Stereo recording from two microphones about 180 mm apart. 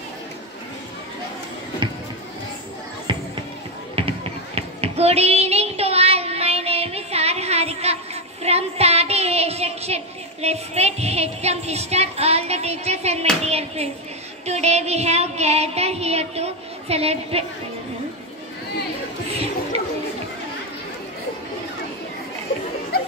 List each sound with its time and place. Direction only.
1.8 s a sound: 25° right (ahead or behind)
3.1 s basketball bounce: 25° right (ahead or behind)
4.6 s child singing: 35° right (ahead or behind)